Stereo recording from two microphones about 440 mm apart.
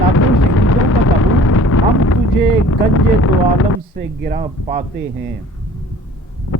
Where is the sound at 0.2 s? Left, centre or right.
Left.